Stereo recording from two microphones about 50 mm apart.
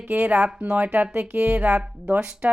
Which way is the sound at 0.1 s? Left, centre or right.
Right.